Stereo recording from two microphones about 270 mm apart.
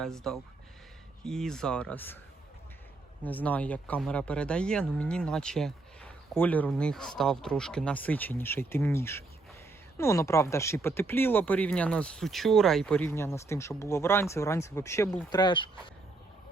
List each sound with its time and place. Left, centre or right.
0.0 s speech: centre
3.2 s speech: centre